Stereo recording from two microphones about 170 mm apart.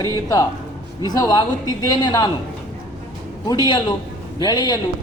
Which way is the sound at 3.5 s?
25° left (ahead or behind).